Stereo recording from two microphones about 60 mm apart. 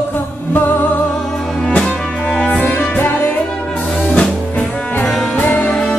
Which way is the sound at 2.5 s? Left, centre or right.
Left.